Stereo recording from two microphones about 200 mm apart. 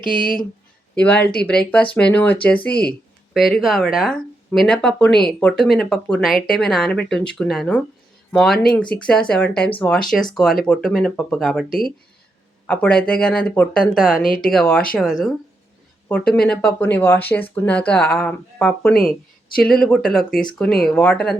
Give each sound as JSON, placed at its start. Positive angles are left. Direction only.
{"t": 0.0, "sound": "speech", "side_deg": 45}
{"t": 0.9, "sound": "speech", "side_deg": 5}
{"t": 14.3, "sound": "speech", "side_deg": 45}
{"t": 14.5, "sound": "speech", "side_deg": 5}
{"t": 16.0, "sound": "speech", "side_deg": 5}